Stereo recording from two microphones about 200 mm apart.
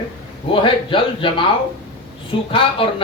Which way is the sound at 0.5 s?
25° left (ahead or behind).